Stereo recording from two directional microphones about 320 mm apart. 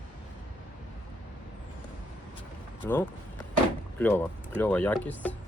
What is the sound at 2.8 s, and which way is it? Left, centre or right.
Speech, centre.